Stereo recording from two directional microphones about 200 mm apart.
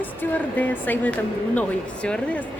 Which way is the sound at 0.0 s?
10° left (ahead or behind).